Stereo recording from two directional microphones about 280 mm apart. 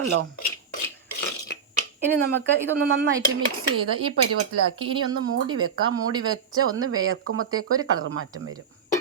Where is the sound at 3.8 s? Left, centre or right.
Right.